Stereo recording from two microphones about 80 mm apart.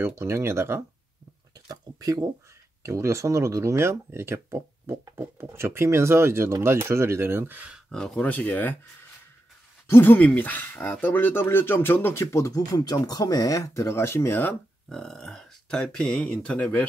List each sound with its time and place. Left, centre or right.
0.0 s speech: right
1.5 s a sound: right
2.8 s speech: right; by 7.8 s centre
7.9 s speech: centre
8.3 s speech: left
9.8 s speech: left
12.7 s speech: left
14.9 s speech: centre